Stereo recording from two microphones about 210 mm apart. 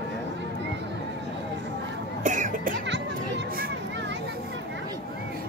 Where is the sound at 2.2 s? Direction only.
35° right (ahead or behind).